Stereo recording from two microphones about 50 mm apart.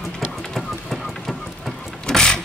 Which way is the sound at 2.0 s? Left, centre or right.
Centre.